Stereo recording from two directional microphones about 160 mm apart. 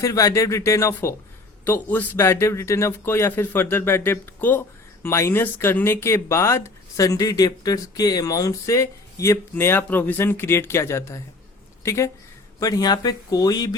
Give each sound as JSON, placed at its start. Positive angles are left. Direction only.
{"t": 0.0, "sound": "speech", "side_deg": 20}